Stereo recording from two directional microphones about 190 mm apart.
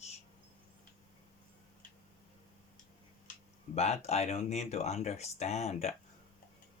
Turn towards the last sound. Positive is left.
turn(degrees=35)  # may be behind; listen again after turning